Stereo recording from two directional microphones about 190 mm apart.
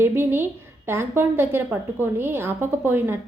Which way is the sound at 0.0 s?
10° right (ahead or behind).